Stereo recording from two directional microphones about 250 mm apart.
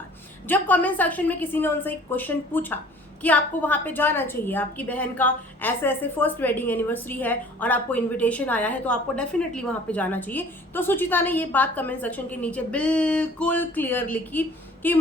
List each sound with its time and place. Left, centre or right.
0.4 s a woman's voice: centre